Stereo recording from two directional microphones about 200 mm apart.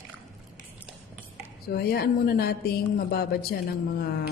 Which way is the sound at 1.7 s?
50° left (ahead or behind).